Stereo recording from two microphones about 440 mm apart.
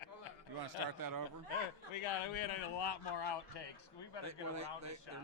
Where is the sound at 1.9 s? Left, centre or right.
Left.